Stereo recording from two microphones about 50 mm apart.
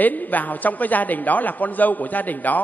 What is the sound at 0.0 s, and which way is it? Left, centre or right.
A man's voice, left.